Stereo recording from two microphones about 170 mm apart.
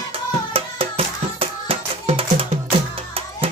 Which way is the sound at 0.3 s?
35° right (ahead or behind).